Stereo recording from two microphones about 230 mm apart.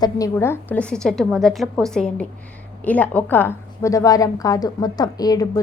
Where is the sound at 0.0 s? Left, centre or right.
Centre.